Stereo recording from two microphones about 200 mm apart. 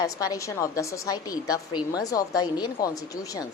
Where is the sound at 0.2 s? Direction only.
15° left (ahead or behind).